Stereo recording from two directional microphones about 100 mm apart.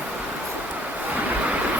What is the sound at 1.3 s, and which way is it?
Vehicle, 15° right (ahead or behind).